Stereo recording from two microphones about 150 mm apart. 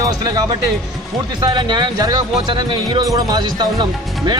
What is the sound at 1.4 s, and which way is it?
Speech, 30° right (ahead or behind).